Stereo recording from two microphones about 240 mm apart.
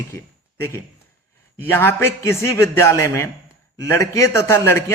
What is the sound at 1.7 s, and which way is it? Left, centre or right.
A man's voice, centre.